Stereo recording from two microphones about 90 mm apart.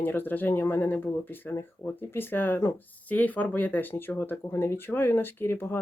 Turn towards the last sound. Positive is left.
turn(degrees=25)  # may be behind; listen again after turning